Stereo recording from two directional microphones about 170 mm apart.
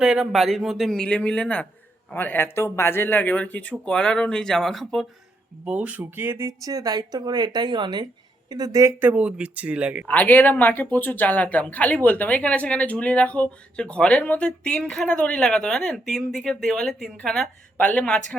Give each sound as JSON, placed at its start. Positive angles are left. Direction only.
{"t": 0.0, "sound": "a man's voice", "side_deg": -5}
{"t": 10.1, "sound": "speech", "side_deg": 10}